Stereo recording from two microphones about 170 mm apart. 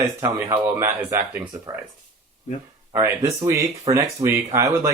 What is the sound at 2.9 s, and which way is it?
Speech, 15° right (ahead or behind).